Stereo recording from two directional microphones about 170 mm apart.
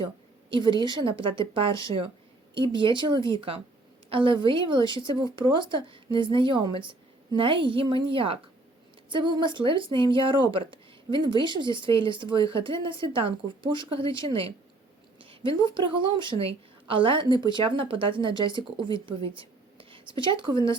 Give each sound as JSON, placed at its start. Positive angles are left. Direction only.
{"t": 0.8, "sound": "a woman's voice", "side_deg": -30}
{"t": 19.4, "sound": "writing", "side_deg": -30}